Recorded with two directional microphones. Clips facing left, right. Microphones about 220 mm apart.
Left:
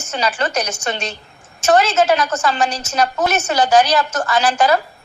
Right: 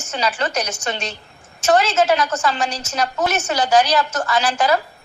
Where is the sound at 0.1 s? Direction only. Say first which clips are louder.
Left 2 dB; 50° left (ahead or behind).